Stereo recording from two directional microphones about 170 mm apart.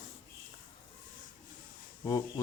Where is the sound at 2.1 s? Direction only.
20° left (ahead or behind).